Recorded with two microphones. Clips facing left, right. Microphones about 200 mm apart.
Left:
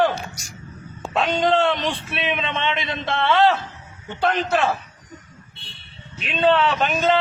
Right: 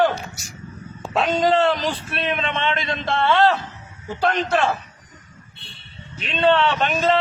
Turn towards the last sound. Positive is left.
turn(degrees=0)  # may be behind; listen again after turning